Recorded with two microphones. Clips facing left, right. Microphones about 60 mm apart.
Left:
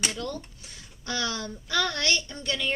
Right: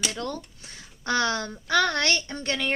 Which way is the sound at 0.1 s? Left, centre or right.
Right.